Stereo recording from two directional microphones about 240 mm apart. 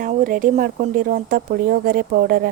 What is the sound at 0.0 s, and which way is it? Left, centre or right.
A woman's voice, right.